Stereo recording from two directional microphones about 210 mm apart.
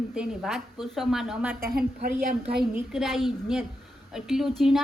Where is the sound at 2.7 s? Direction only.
Centre (ahead or behind).